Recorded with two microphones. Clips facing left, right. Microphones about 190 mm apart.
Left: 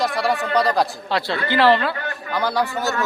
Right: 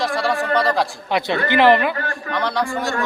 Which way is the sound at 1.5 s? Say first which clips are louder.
Right 2 dB; 15° right (ahead or behind).